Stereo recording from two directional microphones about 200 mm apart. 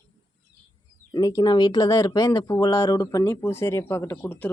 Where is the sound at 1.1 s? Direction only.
15° left (ahead or behind).